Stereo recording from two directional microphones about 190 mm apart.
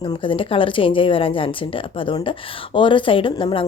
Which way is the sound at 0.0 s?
25° left (ahead or behind).